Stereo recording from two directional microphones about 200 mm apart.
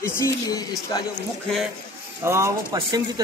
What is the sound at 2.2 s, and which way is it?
Speech, 15° right (ahead or behind).